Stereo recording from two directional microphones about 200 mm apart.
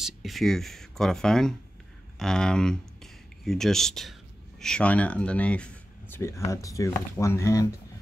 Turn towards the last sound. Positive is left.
turn(degrees=15)  # may be behind; listen again after turning